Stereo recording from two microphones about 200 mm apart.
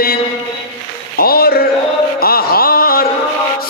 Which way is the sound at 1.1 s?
50° left (ahead or behind).